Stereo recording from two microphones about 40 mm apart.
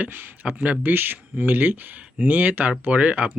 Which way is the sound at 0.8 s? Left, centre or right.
Right.